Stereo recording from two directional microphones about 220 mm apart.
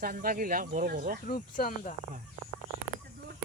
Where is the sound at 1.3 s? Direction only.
40° left (ahead or behind).